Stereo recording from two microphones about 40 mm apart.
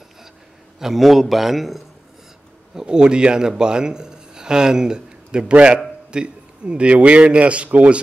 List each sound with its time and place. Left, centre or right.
0.7 s a man's voice: centre
2.7 s a man's voice: centre; by 8.0 s right